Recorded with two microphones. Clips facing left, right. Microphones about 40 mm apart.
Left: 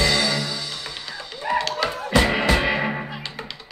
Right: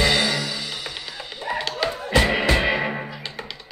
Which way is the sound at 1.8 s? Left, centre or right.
Centre.